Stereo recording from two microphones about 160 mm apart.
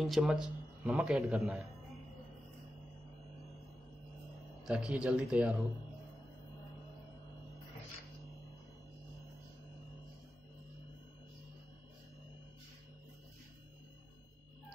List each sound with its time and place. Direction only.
0.0 s speech: centre (ahead or behind)
4.6 s speech: 5° right (ahead or behind)